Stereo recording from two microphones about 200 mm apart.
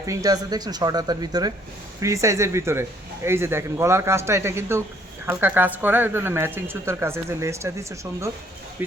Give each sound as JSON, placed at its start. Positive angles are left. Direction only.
{"t": 0.0, "sound": "a woman's voice", "side_deg": -15}